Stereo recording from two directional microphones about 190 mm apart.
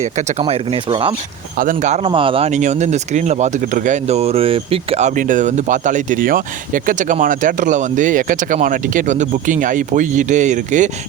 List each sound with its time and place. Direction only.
0.0 s speech: 35° right (ahead or behind)
1.5 s speech: 45° right (ahead or behind)